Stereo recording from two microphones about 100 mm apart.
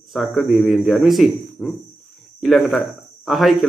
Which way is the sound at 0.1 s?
Centre (ahead or behind).